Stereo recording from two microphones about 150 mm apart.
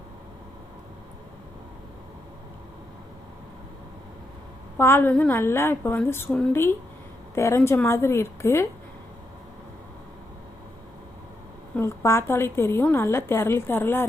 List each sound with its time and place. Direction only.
4.8 s a woman's voice: 15° left (ahead or behind)
11.8 s a woman's voice: 20° left (ahead or behind)